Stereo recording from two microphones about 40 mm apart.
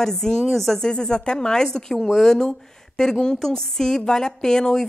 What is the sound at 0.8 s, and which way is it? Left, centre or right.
A woman's voice, centre.